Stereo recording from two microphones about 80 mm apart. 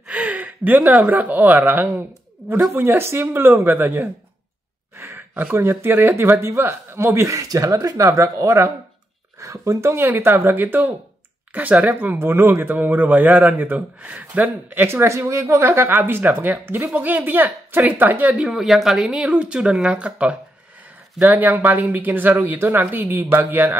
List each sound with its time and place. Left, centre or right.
0.1 s speech: centre; by 7.3 s right
7.3 s speech: right
18.3 s speech: centre; by 23.8 s right